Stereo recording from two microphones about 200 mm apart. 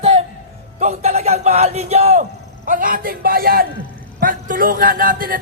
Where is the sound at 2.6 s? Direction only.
45° right (ahead or behind).